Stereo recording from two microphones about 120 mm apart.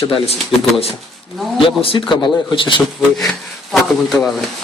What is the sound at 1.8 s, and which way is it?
Speech, 50° left (ahead or behind).